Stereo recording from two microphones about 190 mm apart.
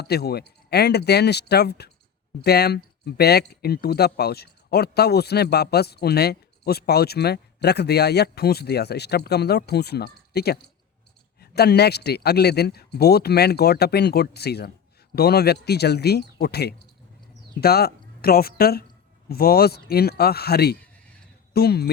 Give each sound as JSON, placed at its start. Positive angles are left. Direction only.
{"t": 0.0, "sound": "speech", "side_deg": 55}